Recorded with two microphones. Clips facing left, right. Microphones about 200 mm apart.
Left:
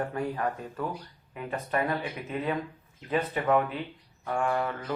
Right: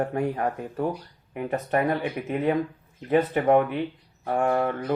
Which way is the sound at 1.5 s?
40° right (ahead or behind).